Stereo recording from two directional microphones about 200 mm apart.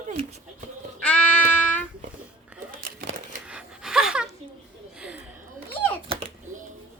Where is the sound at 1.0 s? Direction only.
5° left (ahead or behind).